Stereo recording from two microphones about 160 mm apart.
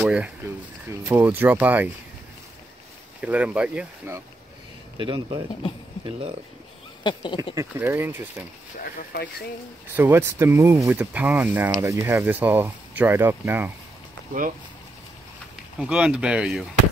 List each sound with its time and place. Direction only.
0.0 s a sound: 10° right (ahead or behind)
1.0 s speech: 10° right (ahead or behind)
3.2 s speech: 10° right (ahead or behind)
4.9 s speech: 30° right (ahead or behind)
7.0 s a sound: 30° left (ahead or behind)
7.5 s speech: 15° right (ahead or behind)
8.9 s speech: 75° left (ahead or behind)
9.9 s speech: 10° right (ahead or behind)
15.8 s speech: 5° right (ahead or behind)